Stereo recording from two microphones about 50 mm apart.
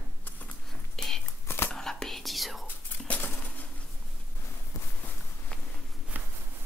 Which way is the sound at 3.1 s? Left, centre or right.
Left.